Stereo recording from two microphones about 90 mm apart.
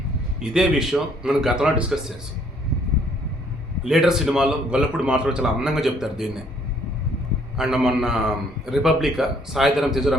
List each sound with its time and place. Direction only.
0.5 s a man's voice: 5° right (ahead or behind)
3.8 s a man's voice: 5° right (ahead or behind)
7.5 s a man's voice: 5° right (ahead or behind)